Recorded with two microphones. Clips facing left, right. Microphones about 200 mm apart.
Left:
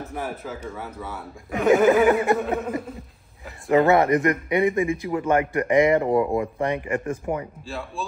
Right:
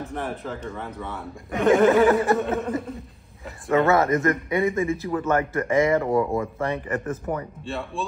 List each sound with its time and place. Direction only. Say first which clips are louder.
0.1 s speech: right 1 dB; 5° left (ahead or behind)
2.0 s speech: even; 15° left (ahead or behind)
2.6 s speech: right 1 dB; centre (ahead or behind)
3.9 s speech: left 2 dB; 15° left (ahead or behind)
7.6 s speech: right 2 dB; centre (ahead or behind)